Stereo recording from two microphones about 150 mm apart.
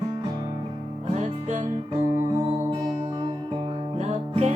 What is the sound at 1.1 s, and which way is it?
Music, 50° right (ahead or behind).